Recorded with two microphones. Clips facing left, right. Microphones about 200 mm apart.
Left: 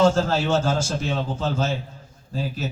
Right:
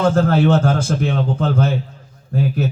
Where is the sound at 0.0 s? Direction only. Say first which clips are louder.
Right 4 dB; 60° right (ahead or behind).